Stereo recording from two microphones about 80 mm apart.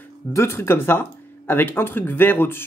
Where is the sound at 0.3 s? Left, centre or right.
Left.